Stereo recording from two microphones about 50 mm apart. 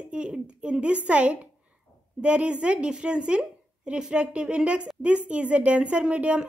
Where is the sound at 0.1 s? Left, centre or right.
Centre.